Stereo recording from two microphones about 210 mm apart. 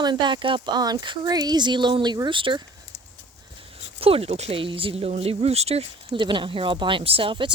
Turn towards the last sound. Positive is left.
turn(degrees=-25)  # may be behind; listen again after turning